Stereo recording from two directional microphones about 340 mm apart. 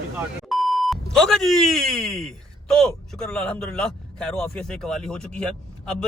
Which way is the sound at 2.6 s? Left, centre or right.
Centre.